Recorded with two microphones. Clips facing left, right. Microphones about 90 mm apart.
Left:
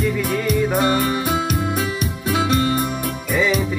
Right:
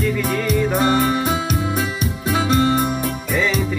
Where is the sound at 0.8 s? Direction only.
30° right (ahead or behind).